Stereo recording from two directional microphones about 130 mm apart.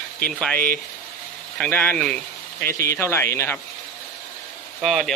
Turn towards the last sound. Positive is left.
turn(degrees=0)  # may be behind; listen again after turning